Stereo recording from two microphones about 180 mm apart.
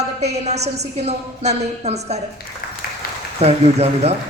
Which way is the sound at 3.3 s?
35° right (ahead or behind).